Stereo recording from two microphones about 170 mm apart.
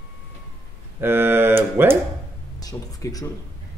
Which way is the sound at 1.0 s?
15° right (ahead or behind).